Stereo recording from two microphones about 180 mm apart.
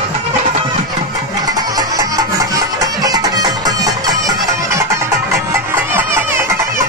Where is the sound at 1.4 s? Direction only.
20° right (ahead or behind).